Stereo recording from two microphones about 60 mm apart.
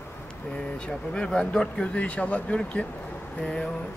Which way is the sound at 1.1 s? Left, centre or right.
Centre.